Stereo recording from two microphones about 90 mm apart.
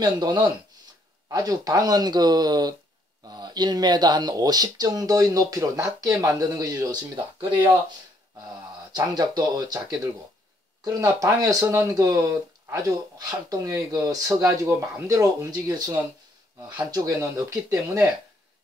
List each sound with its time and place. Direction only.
0.0 s speech: 55° right (ahead or behind)
1.3 s speech: 45° right (ahead or behind)
8.9 s speech: 50° right (ahead or behind)